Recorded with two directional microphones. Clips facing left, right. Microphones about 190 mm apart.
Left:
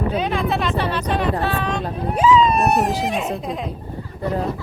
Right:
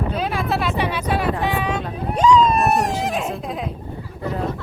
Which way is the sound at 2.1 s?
5° left (ahead or behind).